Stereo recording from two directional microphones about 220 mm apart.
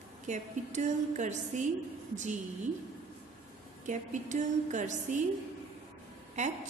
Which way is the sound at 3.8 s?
35° right (ahead or behind).